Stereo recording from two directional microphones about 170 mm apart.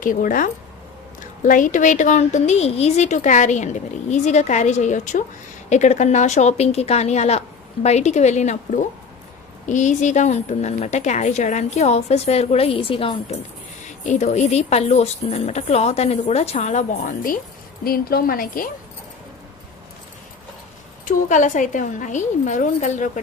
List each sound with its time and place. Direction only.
0.0 s a woman's voice: 50° left (ahead or behind); by 13.1 s 30° left (ahead or behind)
13.8 s a woman's voice: 45° left (ahead or behind)
21.0 s a woman's voice: 45° left (ahead or behind)